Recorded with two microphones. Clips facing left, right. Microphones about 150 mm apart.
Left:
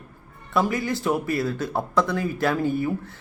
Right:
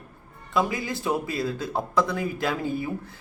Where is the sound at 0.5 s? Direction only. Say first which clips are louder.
Left 3 dB; 20° right (ahead or behind).